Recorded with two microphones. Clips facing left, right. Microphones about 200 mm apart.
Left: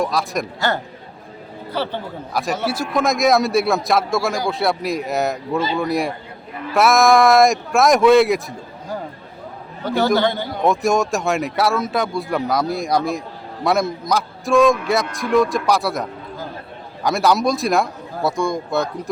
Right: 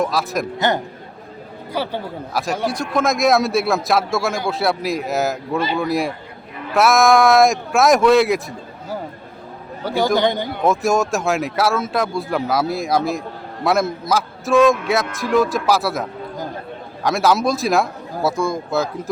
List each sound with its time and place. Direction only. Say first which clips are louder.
0.0 s a man's voice: right 1 dB; centre (ahead or behind)
1.7 s a man's voice: even; 10° right (ahead or behind)
2.3 s a man's voice: even; centre (ahead or behind)
9.8 s a man's voice: even; 10° right (ahead or behind)
10.6 s a man's voice: even; centre (ahead or behind)